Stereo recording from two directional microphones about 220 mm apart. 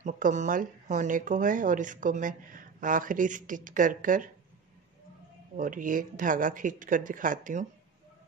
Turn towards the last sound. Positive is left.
turn(degrees=-35)  # may be behind; listen again after turning